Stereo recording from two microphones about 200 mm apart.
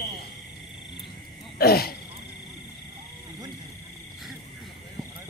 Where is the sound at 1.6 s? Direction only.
50° left (ahead or behind).